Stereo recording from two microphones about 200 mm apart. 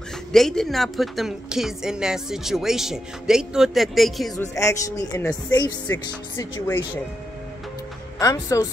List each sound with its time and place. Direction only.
0.3 s a woman's voice: centre (ahead or behind)
4.6 s speech: 15° left (ahead or behind)
8.2 s speech: 15° left (ahead or behind)